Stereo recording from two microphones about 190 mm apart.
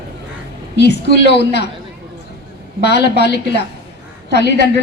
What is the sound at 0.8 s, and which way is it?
Speech, 60° left (ahead or behind).